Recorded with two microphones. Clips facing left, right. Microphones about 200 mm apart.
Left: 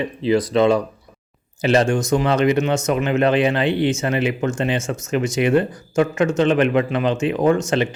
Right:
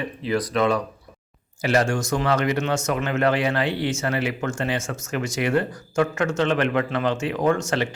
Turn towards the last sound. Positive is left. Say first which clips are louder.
# left 4 dB
turn(degrees=20)  # may be behind; listen again after turning